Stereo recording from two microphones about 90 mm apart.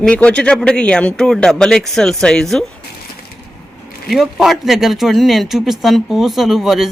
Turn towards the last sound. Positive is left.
turn(degrees=-5)  # may be behind; listen again after turning